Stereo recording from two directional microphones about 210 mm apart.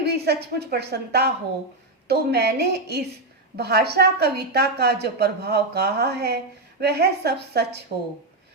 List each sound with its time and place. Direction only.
0.0 s a woman's voice: 50° right (ahead or behind)